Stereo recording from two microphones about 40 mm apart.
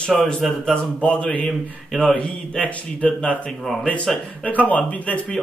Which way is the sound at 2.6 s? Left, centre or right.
Left.